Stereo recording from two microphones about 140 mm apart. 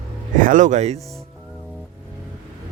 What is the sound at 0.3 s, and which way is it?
Speech, 65° right (ahead or behind).